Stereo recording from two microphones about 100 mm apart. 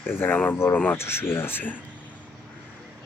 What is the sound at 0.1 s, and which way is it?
Speech, 20° left (ahead or behind).